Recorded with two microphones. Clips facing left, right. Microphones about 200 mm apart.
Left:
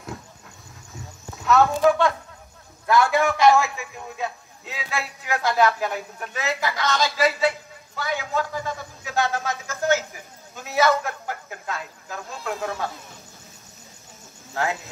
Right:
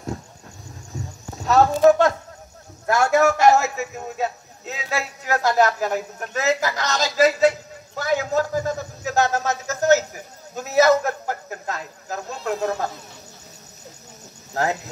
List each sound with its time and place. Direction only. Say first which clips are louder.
0.9 s a sound: right 7 dB; 40° right (ahead or behind)
1.3 s a man's voice: right 1 dB; 40° right (ahead or behind)
14.5 s speech: right 3 dB; 40° right (ahead or behind)